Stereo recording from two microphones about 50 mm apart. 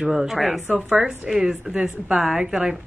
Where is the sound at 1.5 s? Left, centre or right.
Centre.